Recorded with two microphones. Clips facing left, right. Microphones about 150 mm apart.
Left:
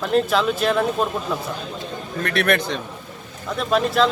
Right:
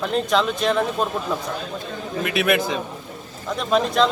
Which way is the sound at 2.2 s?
5° right (ahead or behind).